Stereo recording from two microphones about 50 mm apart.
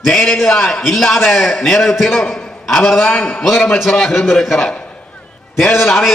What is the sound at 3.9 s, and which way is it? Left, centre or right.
Speech, centre.